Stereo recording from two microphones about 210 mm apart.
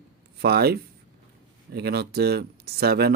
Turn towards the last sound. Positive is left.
turn(degrees=-50)  # may be behind; listen again after turning